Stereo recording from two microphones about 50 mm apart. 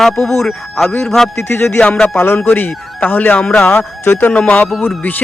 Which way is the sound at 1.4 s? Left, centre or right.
Left.